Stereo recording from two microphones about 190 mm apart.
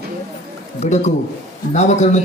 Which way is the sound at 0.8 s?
40° left (ahead or behind).